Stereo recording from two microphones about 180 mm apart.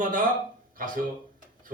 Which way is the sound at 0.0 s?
50° right (ahead or behind).